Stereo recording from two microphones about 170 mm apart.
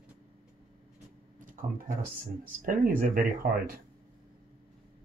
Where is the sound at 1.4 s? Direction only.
55° right (ahead or behind).